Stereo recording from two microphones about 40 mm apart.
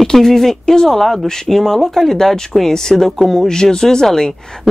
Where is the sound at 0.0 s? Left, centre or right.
Centre.